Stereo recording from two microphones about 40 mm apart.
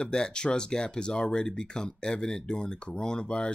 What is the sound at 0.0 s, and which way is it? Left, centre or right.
Speech, centre.